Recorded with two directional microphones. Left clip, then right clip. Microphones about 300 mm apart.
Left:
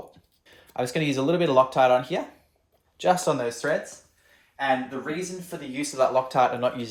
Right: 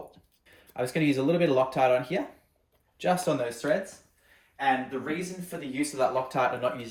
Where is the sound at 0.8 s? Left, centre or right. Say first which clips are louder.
Left 1 dB; centre.